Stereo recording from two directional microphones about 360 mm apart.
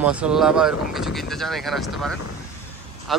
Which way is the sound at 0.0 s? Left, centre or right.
Centre.